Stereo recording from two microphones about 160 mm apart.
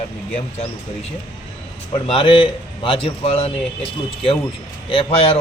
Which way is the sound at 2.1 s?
35° left (ahead or behind).